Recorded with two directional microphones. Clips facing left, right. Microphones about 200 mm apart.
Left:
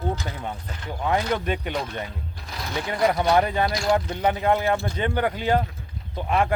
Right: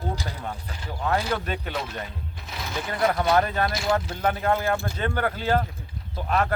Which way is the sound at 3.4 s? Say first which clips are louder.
Left 2 dB; 10° left (ahead or behind).